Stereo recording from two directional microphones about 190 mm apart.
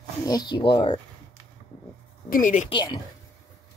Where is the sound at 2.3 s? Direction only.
45° left (ahead or behind).